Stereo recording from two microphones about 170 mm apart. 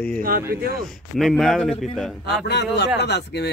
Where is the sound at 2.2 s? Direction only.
80° left.